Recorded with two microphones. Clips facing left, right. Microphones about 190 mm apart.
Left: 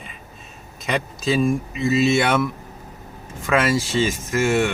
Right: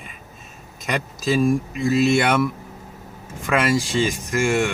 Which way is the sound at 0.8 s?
Centre (ahead or behind).